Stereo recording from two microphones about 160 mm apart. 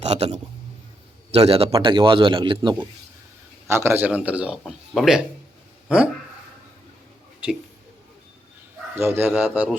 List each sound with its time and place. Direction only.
0.0 s a man's voice: 40° right (ahead or behind)
3.7 s a man's voice: 15° right (ahead or behind)
9.0 s a man's voice: 15° right (ahead or behind)